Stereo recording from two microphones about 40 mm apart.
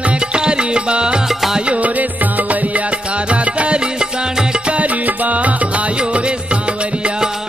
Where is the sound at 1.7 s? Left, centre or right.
Right.